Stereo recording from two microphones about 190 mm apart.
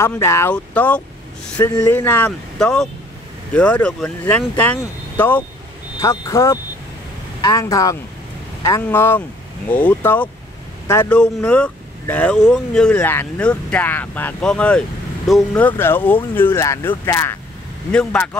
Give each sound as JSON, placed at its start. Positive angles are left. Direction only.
{"t": 0.0, "sound": "speech", "side_deg": 15}